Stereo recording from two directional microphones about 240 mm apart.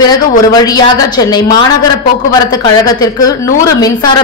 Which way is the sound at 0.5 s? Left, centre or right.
Centre.